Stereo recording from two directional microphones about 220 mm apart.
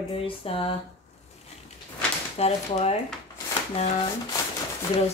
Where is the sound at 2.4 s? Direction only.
30° left (ahead or behind).